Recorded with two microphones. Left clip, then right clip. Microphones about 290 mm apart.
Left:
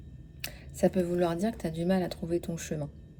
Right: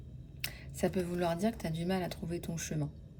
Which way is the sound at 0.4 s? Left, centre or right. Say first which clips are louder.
Left 6 dB; centre.